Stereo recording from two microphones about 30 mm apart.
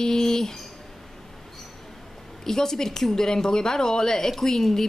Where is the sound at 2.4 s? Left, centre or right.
Centre.